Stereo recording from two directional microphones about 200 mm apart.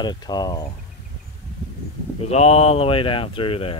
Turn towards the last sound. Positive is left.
turn(degrees=25)  # may be behind; listen again after turning